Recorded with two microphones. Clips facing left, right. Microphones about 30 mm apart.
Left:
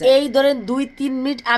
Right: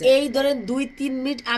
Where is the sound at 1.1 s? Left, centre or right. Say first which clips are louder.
Left 4 dB; left.